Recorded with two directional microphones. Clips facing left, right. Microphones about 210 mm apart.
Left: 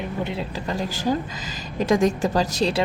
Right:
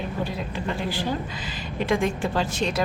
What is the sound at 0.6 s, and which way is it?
A woman's voice, 40° left (ahead or behind).